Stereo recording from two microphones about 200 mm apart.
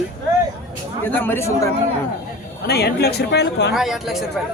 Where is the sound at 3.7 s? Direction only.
Centre (ahead or behind).